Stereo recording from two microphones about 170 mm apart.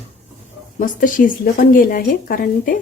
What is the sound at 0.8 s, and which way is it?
Speech, 50° left (ahead or behind).